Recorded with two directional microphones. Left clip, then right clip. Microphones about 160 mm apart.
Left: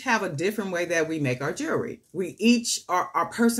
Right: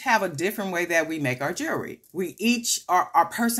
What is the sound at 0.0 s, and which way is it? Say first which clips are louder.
Speech: right 2 dB; 35° right (ahead or behind).